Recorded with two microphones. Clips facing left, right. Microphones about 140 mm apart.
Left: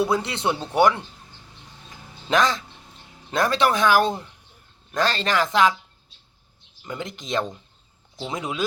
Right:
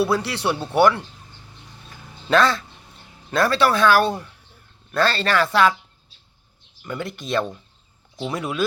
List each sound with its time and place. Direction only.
0.0 s speech: 20° left (ahead or behind)
1.9 s a sound: 15° left (ahead or behind)
3.3 s speech: 15° left (ahead or behind)
6.8 s speech: 15° left (ahead or behind)